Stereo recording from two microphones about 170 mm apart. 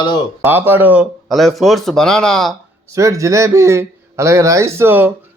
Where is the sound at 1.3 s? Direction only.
Centre (ahead or behind).